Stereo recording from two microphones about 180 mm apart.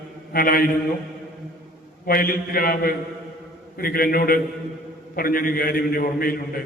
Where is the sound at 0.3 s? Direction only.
55° left (ahead or behind).